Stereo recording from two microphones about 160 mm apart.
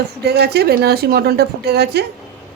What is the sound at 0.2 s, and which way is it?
A woman's voice, 90° right.